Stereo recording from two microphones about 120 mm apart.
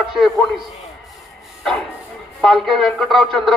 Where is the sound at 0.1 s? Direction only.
Centre (ahead or behind).